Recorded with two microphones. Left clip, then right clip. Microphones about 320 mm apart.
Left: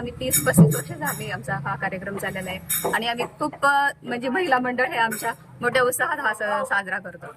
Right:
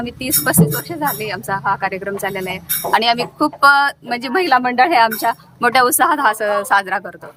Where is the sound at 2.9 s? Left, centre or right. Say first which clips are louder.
Right 12 dB; centre.